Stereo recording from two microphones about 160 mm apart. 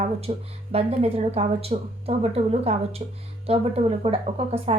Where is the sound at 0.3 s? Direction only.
40° right (ahead or behind).